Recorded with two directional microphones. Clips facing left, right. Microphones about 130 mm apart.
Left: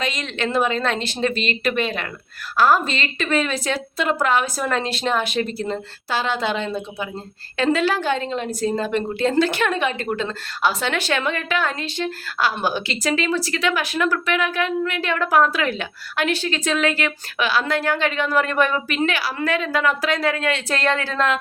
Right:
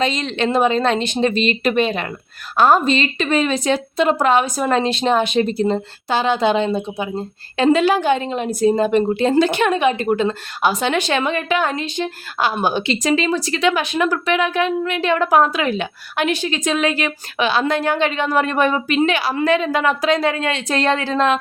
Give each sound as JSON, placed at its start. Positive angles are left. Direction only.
{"t": 0.0, "sound": "speech", "side_deg": -25}